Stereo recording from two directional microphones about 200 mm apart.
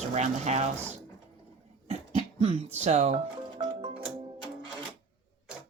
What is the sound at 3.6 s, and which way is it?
Music, 20° right (ahead or behind).